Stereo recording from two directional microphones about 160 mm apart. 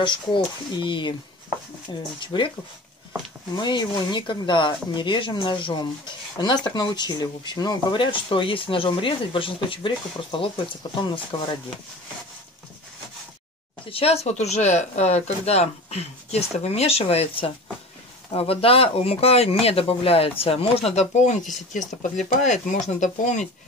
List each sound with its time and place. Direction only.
0.0 s speech: 30° left (ahead or behind)
2.1 s speech: 30° left (ahead or behind)
3.5 s speech: 25° left (ahead or behind)
13.8 s speech: 40° left (ahead or behind)